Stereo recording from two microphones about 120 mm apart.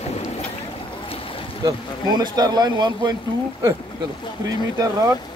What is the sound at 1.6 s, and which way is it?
Speech, 35° right (ahead or behind).